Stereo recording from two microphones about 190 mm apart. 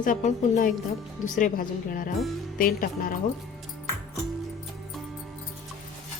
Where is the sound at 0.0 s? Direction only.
40° left (ahead or behind).